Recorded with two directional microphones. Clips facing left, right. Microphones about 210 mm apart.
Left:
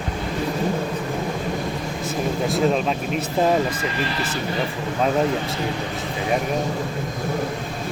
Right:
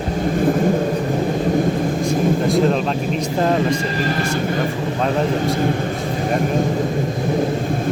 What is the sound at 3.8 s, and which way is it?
Speech, 40° right (ahead or behind).